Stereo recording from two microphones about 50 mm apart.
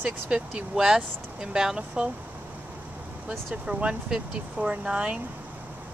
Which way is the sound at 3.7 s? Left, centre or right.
Right.